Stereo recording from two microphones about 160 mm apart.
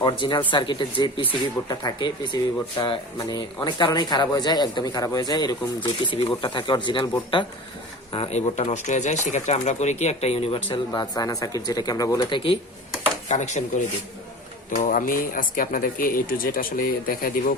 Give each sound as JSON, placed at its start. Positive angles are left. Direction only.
{"t": 0.0, "sound": "speech", "side_deg": 25}
{"t": 8.3, "sound": "speech", "side_deg": 45}
{"t": 13.2, "sound": "speech", "side_deg": 45}
{"t": 14.8, "sound": "speech", "side_deg": 60}